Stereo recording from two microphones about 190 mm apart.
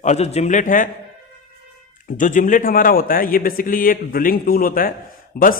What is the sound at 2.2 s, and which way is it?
A man's voice, 40° left (ahead or behind).